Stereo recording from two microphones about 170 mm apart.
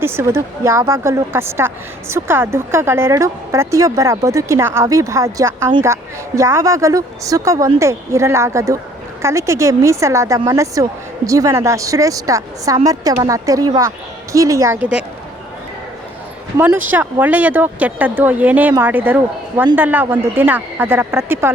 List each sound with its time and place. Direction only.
0.0 s a woman's voice: 15° right (ahead or behind)
16.6 s a woman's voice: 10° right (ahead or behind)